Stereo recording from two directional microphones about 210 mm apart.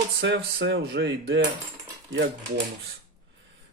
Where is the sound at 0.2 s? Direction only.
60° right (ahead or behind).